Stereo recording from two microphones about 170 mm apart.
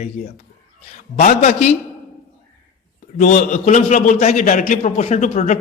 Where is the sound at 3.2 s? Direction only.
50° left (ahead or behind).